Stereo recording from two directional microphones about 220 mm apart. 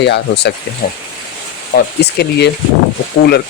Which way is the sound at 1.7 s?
45° left (ahead or behind).